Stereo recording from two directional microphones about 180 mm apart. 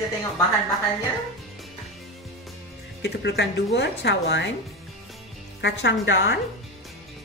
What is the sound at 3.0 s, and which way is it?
Speech, 70° left (ahead or behind).